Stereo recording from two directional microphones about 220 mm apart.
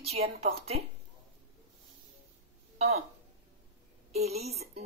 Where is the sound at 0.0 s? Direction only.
30° right (ahead or behind).